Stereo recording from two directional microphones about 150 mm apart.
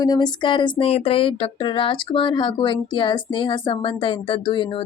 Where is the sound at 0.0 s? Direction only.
25° left (ahead or behind).